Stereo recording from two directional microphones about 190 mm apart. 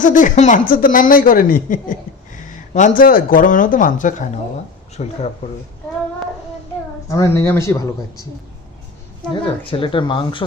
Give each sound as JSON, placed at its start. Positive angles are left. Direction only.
{"t": 0.0, "sound": "speech", "side_deg": 45}
{"t": 7.1, "sound": "speech", "side_deg": 15}
{"t": 9.3, "sound": "speech", "side_deg": 30}